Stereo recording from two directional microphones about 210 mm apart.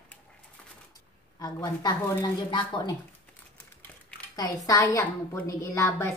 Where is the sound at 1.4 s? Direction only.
20° left (ahead or behind).